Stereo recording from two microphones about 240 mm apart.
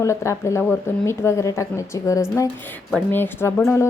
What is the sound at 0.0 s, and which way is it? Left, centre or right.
A woman's voice, centre.